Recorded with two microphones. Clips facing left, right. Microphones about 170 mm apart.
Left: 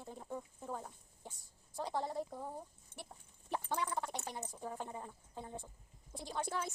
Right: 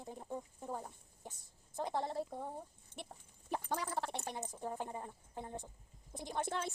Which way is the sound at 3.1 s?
45° right (ahead or behind).